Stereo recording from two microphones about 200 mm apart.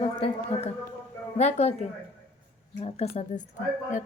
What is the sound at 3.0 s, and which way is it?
Speech, 30° left (ahead or behind).